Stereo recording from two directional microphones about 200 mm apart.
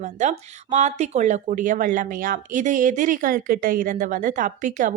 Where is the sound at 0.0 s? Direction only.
35° right (ahead or behind).